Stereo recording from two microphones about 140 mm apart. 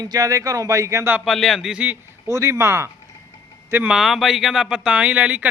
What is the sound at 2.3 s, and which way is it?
Speech, 20° right (ahead or behind).